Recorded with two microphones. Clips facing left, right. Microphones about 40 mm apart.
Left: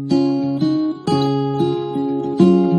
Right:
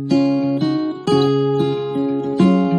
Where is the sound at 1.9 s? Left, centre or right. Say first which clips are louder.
Right 1 dB; right.